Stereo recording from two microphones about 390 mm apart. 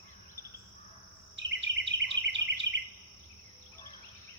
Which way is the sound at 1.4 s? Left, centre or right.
Right.